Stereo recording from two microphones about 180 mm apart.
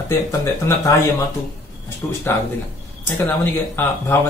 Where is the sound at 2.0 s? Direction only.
10° left (ahead or behind).